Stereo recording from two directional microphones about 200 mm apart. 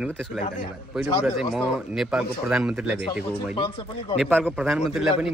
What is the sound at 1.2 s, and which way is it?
A man's voice, centre (ahead or behind).